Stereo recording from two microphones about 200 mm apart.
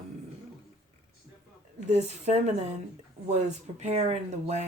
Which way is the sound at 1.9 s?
35° right (ahead or behind).